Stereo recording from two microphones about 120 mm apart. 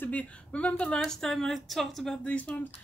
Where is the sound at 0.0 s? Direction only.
10° left (ahead or behind).